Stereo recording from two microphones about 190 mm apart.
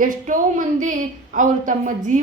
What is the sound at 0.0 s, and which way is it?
A woman's voice, 45° right (ahead or behind).